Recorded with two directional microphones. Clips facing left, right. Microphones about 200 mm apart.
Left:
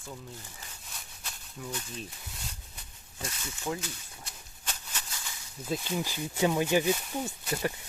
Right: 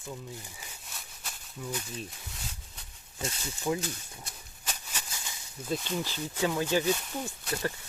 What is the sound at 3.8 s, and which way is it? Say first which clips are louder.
Speech: right 4 dB; 50° right (ahead or behind).